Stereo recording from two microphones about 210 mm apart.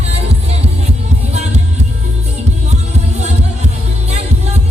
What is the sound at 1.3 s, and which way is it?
Music, 30° right (ahead or behind).